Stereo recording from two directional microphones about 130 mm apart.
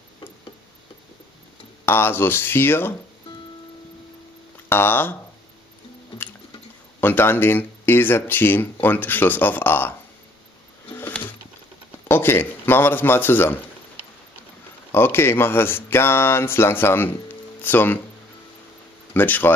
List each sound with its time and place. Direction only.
1.9 s speech: 15° left (ahead or behind)
4.6 s speech: 15° left (ahead or behind)
7.0 s speech: 15° left (ahead or behind)
10.9 s a sound: 15° left (ahead or behind)
12.1 s speech: 15° left (ahead or behind)
14.9 s speech: 15° left (ahead or behind)
19.1 s speech: 15° left (ahead or behind)